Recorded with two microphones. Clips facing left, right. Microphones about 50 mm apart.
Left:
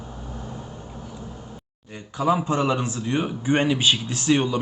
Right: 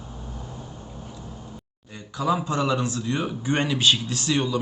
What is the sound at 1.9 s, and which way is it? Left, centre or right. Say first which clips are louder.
Speech: left 2 dB; left.